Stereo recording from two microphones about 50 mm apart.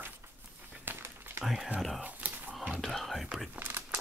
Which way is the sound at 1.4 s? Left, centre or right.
Centre.